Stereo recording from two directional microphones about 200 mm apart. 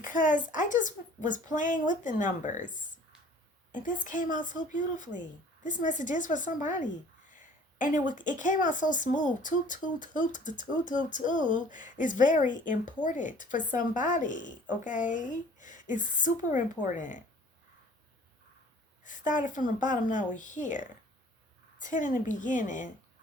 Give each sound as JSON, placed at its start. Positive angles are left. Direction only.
{"t": 0.0, "sound": "a woman's voice", "side_deg": 40}
{"t": 3.8, "sound": "a woman's voice", "side_deg": 40}
{"t": 19.0, "sound": "a woman's voice", "side_deg": 40}